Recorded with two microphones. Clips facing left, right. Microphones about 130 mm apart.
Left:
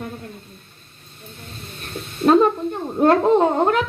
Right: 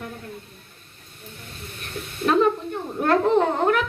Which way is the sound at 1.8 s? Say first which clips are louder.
Left 6 dB; 30° left (ahead or behind).